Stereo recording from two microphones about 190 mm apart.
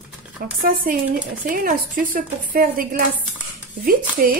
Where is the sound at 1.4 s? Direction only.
45° right (ahead or behind).